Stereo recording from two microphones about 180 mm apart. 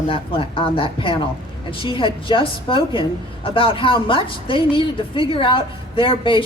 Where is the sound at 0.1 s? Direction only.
30° left (ahead or behind).